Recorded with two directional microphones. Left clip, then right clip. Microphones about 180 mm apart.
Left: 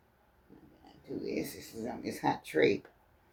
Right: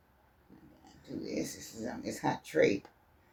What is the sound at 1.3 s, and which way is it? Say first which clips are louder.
Speech: even; 30° left (ahead or behind).